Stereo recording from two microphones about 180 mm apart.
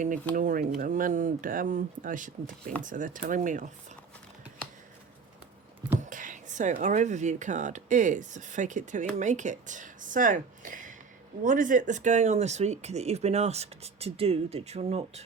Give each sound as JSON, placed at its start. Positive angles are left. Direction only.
{"t": 0.3, "sound": "speech", "side_deg": -50}
{"t": 6.0, "sound": "speech", "side_deg": -45}